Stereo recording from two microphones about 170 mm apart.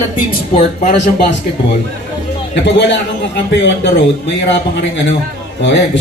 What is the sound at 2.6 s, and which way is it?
A man's voice, 90° left.